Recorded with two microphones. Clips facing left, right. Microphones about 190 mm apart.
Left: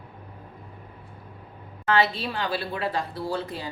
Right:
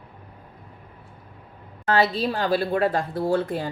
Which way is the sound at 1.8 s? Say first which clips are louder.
Right 3 dB; 40° right (ahead or behind).